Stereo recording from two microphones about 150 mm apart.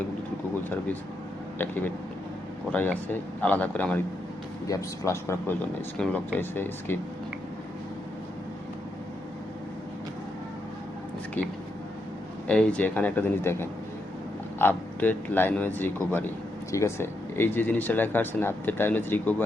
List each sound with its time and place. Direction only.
1.5 s speech: 10° left (ahead or behind)
4.6 s speech: 20° left (ahead or behind)
12.5 s speech: 5° left (ahead or behind)